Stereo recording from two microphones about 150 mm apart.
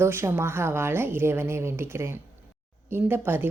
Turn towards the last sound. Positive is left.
turn(degrees=-15)  # may be behind; listen again after turning